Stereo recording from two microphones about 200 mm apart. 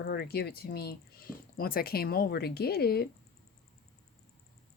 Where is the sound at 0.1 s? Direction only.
50° left (ahead or behind).